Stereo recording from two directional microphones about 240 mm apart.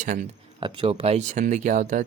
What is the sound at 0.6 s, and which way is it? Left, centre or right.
Speech, right.